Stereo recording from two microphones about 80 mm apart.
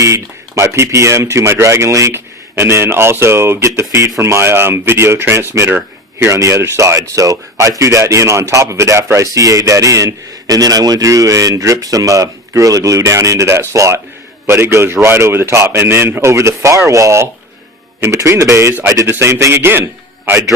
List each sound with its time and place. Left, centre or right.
0.0 s speech: right
6.2 s speech: right